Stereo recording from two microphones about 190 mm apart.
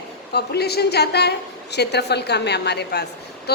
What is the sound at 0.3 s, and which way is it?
A woman's voice, 60° left (ahead or behind).